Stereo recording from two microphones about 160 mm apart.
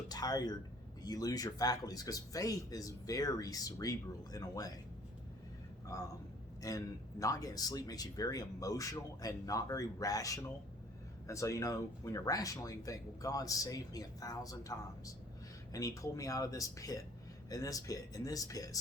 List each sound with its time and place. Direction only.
0.1 s speech: 25° left (ahead or behind)
5.8 s a man's voice: 20° left (ahead or behind)